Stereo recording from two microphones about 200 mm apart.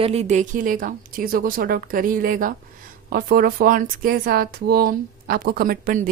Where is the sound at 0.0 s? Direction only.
30° right (ahead or behind).